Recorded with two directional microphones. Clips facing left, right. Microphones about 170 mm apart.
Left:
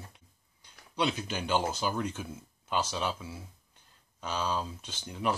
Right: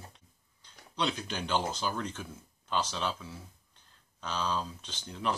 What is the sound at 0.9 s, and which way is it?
Speech, 10° left (ahead or behind).